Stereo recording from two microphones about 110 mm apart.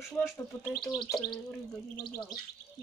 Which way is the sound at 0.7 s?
45° left (ahead or behind).